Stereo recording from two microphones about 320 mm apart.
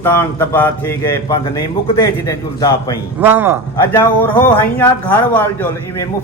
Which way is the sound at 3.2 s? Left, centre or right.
Centre.